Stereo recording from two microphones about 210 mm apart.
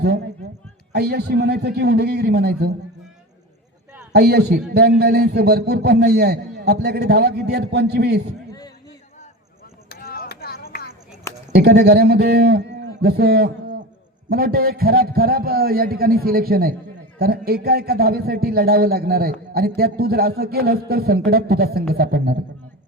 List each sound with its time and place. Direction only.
0.9 s a man's voice: 50° right (ahead or behind)
4.1 s a man's voice: 50° right (ahead or behind)
9.9 s chop: 45° left (ahead or behind)
11.5 s a man's voice: 50° right (ahead or behind)